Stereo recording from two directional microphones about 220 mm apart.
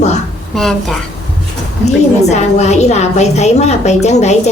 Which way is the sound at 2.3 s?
30° left (ahead or behind).